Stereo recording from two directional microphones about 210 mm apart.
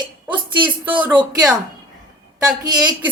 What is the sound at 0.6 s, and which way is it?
Speech, 5° right (ahead or behind).